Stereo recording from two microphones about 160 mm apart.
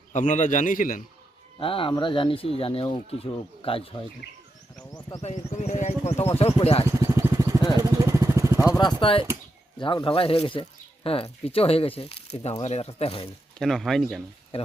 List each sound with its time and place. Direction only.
0.1 s a man's voice: 50° left (ahead or behind)
1.5 s speech: 35° left (ahead or behind)
5.2 s speech: 45° left (ahead or behind)
6.9 s vehicle: 20° right (ahead or behind)
8.6 s speech: 25° left (ahead or behind)
13.6 s speech: centre (ahead or behind)